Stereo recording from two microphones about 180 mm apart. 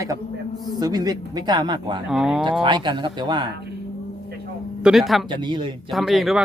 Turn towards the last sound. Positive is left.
turn(degrees=0)  # may be behind; listen again after turning